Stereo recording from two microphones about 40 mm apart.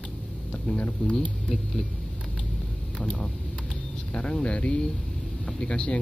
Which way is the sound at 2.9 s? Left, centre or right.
Left.